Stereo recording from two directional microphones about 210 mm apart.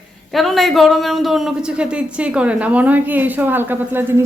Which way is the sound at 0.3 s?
Centre (ahead or behind).